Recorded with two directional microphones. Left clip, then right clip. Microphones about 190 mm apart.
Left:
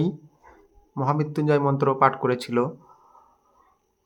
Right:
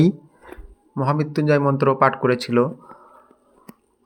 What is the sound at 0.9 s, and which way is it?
Speech, 10° right (ahead or behind).